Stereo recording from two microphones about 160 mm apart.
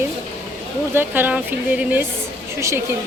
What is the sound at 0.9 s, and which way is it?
Speech, 15° right (ahead or behind).